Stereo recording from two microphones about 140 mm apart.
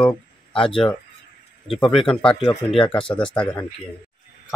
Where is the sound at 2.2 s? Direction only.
5° left (ahead or behind).